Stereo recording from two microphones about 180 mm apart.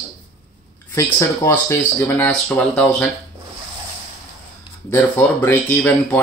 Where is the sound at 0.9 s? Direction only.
15° left (ahead or behind).